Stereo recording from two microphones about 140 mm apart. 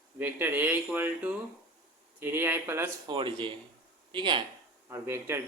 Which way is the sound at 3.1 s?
35° right (ahead or behind).